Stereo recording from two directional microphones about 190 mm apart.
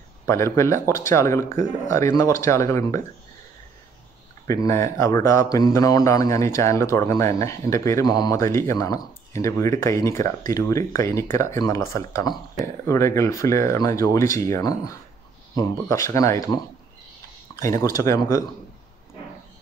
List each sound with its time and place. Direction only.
0.3 s speech: 15° left (ahead or behind)
4.5 s speech: 15° left (ahead or behind)
17.6 s speech: 15° left (ahead or behind)